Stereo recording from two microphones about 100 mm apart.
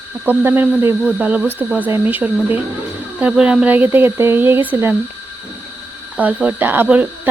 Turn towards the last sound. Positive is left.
turn(degrees=-15)  # may be behind; listen again after turning